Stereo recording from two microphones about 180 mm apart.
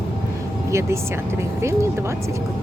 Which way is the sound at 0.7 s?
15° right (ahead or behind).